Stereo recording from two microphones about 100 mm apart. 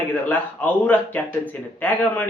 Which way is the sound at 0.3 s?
15° left (ahead or behind).